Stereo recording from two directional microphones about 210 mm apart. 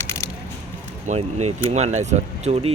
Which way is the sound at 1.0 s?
30° right (ahead or behind).